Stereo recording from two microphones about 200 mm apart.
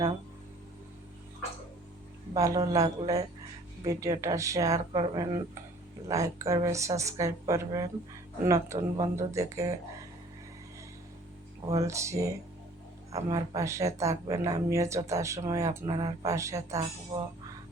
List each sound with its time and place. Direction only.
2.3 s speech: 15° right (ahead or behind)
11.7 s speech: 15° right (ahead or behind)